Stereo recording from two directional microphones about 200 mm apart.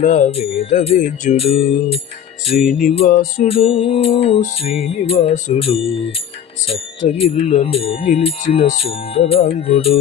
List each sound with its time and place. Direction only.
0.0 s music: 35° left (ahead or behind)
3.1 s music: 45° left (ahead or behind)
3.5 s music: 30° left (ahead or behind)